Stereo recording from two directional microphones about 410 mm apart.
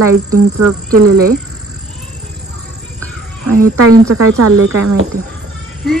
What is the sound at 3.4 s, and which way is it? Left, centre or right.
Speech, right.